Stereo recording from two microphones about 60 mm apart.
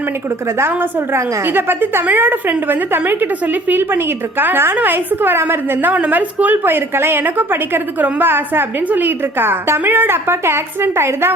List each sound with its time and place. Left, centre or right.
0.6 s a woman's voice: right